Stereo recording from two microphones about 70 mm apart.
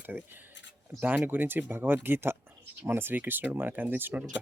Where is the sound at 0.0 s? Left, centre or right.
Right.